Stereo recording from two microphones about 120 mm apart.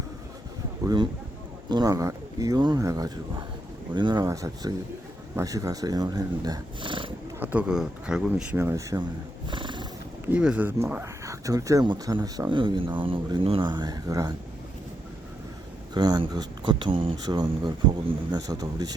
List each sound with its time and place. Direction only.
1.7 s speech: 30° right (ahead or behind)
4.3 s speech: 30° right (ahead or behind); by 7.1 s 45° right (ahead or behind)
7.3 s speech: 15° right (ahead or behind)
7.7 s speech: 5° right (ahead or behind)
8.5 s speech: 25° right (ahead or behind)
9.5 s horse: 40° right (ahead or behind)
10.2 s speech: 10° right (ahead or behind); by 14.3 s 30° right (ahead or behind)
16.0 s speech: 35° right (ahead or behind)
17.2 s speech: 35° right (ahead or behind)